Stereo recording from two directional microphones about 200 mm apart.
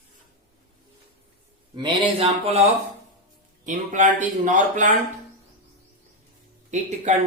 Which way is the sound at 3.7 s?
40° right (ahead or behind).